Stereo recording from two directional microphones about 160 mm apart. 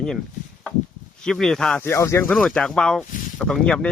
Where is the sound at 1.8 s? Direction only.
15° left (ahead or behind).